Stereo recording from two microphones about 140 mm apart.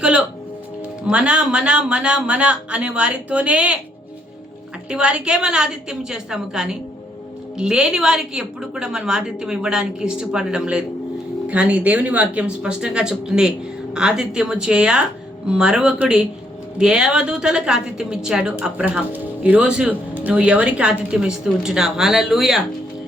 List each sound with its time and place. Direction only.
0.0 s music: 5° right (ahead or behind)
1.0 s speech: 10° right (ahead or behind)
4.9 s a woman's voice: 5° right (ahead or behind)